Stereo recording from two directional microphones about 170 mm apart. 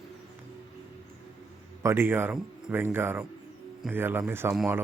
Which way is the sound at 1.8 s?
15° right (ahead or behind).